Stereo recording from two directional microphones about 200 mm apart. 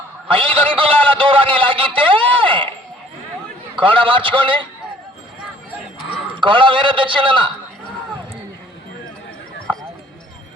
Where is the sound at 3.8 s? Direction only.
25° right (ahead or behind).